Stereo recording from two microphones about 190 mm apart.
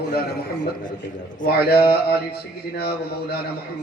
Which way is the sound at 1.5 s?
55° left (ahead or behind).